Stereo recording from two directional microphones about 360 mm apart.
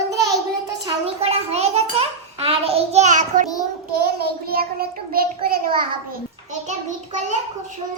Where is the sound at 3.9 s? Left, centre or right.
Right.